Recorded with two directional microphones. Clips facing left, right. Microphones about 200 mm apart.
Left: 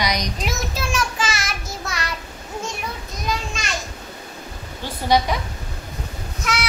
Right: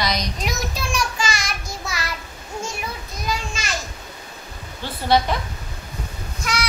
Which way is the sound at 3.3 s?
Centre (ahead or behind).